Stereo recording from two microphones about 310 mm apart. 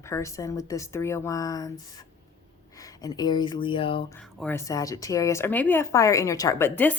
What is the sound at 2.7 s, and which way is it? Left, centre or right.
Speech, centre.